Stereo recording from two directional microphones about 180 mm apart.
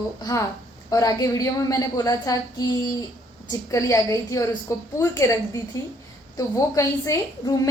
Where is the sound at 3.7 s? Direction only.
20° left (ahead or behind).